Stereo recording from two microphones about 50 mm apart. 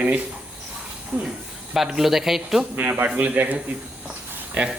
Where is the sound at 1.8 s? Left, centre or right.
Centre.